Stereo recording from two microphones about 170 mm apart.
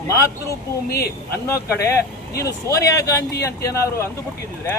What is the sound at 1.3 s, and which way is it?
Speech, 15° left (ahead or behind).